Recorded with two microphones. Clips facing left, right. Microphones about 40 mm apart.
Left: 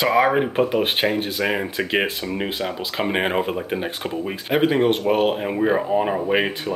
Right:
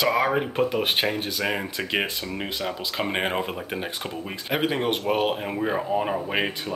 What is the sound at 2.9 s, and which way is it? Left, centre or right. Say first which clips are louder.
Speech: left 5 dB; centre.